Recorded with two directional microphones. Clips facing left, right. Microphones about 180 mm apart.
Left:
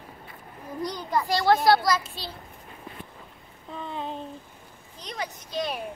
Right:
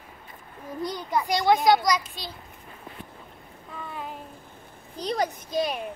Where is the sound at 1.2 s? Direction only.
20° right (ahead or behind).